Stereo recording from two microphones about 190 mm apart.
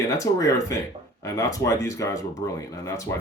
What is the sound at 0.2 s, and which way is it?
Speech, 15° left (ahead or behind).